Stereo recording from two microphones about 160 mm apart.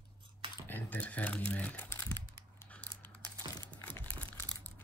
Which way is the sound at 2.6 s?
10° left (ahead or behind).